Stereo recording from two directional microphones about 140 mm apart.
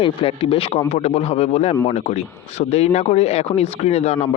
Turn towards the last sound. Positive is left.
turn(degrees=50)  # may be behind; listen again after turning